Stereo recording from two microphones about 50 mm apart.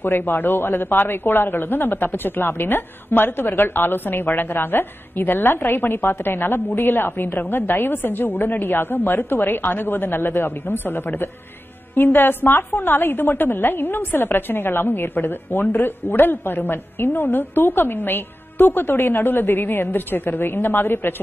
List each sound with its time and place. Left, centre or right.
0.0 s a woman's voice: left